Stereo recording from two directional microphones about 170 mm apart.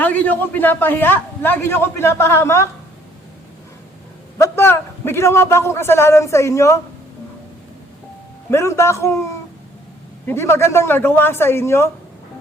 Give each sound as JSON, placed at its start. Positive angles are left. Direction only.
{"t": 0.0, "sound": "a man's voice", "side_deg": 10}
{"t": 4.4, "sound": "a man's voice", "side_deg": 15}
{"t": 8.4, "sound": "a man's voice", "side_deg": 15}
{"t": 10.2, "sound": "a man's voice", "side_deg": 15}